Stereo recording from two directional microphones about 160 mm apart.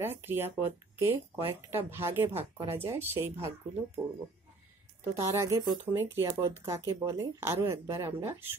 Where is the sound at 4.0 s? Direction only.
25° right (ahead or behind).